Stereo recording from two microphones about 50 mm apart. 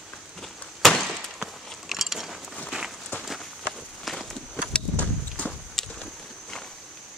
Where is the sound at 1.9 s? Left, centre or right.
Centre.